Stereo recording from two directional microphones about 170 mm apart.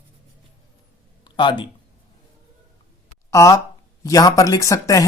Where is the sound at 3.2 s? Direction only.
20° left (ahead or behind).